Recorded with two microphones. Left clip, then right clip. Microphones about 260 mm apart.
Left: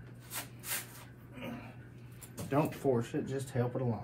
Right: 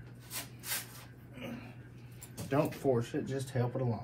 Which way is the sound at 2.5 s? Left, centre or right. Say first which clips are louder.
Even; centre.